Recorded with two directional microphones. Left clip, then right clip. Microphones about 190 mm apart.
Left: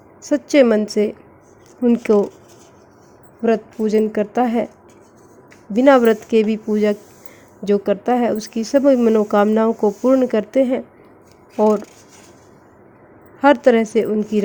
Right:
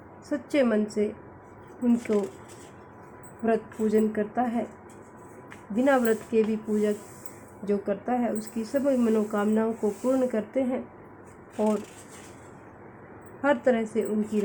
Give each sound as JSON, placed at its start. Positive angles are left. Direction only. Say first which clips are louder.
{"t": 0.3, "sound": "speech", "louder": "left 12 dB", "side_deg": 45}
{"t": 3.4, "sound": "speech", "louder": "left 8 dB", "side_deg": 45}
{"t": 5.7, "sound": "speech", "louder": "left 11 dB", "side_deg": 50}
{"t": 13.4, "sound": "speech", "louder": "left 11 dB", "side_deg": 45}